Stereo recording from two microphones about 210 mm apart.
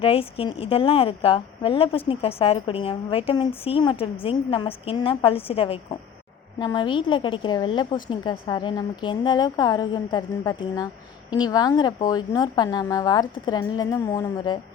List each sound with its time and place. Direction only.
0.0 s a woman's voice: 25° left (ahead or behind)